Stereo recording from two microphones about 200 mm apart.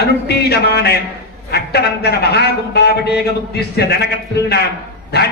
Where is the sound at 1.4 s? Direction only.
55° left (ahead or behind).